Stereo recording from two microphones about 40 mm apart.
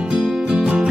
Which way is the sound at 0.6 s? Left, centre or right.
Right.